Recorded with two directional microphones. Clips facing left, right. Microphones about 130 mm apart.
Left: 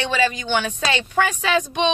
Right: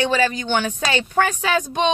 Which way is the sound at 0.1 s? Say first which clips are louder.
Right 1 dB; 40° right (ahead or behind).